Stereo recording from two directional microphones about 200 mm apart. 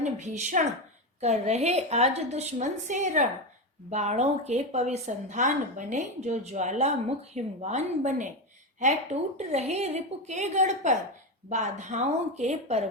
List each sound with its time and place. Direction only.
0.0 s a woman's voice: 35° right (ahead or behind)
9.4 s a woman's voice: 35° right (ahead or behind)